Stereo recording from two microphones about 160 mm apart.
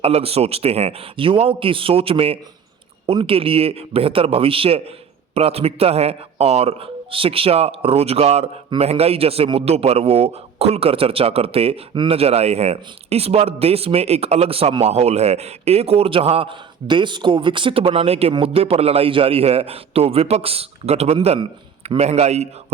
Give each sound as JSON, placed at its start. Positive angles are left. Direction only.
{"t": 0.0, "sound": "a man's voice", "side_deg": -40}